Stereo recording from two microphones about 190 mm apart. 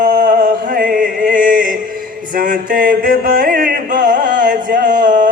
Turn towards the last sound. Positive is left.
turn(degrees=-45)  # may be behind; listen again after turning